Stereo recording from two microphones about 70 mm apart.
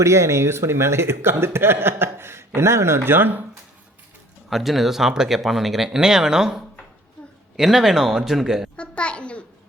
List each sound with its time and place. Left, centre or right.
0.0 s speech: right
4.4 s speech: centre
8.7 s a child's voice: centre